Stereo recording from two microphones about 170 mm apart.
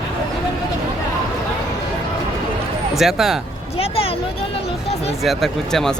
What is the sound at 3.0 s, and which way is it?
Speech, centre (ahead or behind).